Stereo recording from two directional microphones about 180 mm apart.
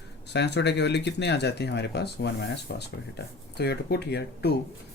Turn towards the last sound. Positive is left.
turn(degrees=65)  # may be behind; listen again after turning